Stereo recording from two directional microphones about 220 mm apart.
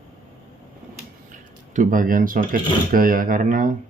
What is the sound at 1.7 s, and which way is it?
Speech, 35° right (ahead or behind).